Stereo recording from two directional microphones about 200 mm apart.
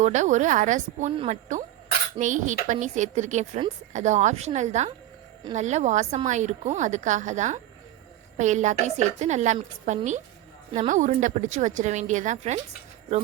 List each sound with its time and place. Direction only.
0.0 s speech: 35° right (ahead or behind)